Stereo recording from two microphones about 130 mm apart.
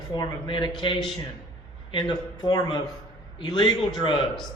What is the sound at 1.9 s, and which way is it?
Speech, 35° left (ahead or behind).